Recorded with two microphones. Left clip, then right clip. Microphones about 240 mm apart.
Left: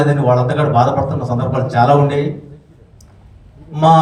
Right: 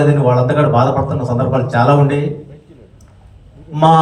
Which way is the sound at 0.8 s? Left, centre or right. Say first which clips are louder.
Even; left.